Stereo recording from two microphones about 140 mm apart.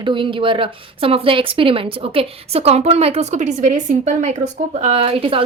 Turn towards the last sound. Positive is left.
turn(degrees=-40)  # may be behind; listen again after turning